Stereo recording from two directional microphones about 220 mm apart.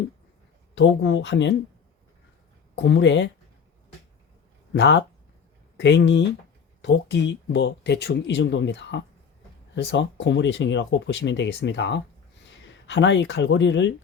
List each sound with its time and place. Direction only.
0.8 s speech: 55° left (ahead or behind)
2.7 s speech: 55° left (ahead or behind)
4.7 s speech: 55° left (ahead or behind)